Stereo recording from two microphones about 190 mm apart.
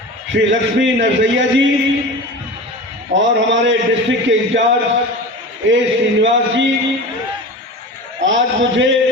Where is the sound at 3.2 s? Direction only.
75° right (ahead or behind).